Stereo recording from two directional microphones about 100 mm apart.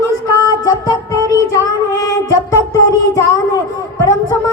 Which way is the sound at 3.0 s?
35° left (ahead or behind).